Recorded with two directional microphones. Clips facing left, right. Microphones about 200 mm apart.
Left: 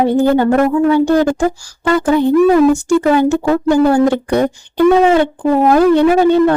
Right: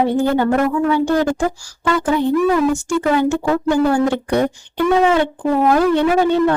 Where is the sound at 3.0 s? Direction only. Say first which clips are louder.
Left 4 dB; 35° left (ahead or behind).